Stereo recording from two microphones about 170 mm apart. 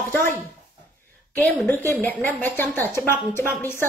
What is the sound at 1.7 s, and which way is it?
A woman's voice, 10° left (ahead or behind).